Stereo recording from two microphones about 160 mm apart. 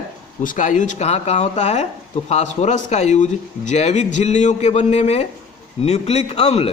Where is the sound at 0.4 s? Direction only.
50° left (ahead or behind).